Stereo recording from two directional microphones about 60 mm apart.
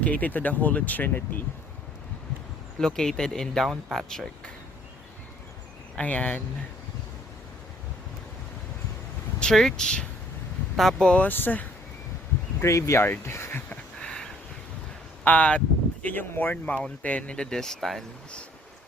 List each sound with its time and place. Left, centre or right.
0.0 s speech: left
2.7 s speech: centre
6.0 s speech: left
9.4 s speech: centre
11.0 s speech: centre
11.3 s speech: left
12.6 s speech: left
13.0 s speech: left
13.7 s a sound: centre
15.2 s speech: left
16.0 s speech: left
17.0 s speech: left; by 18.0 s centre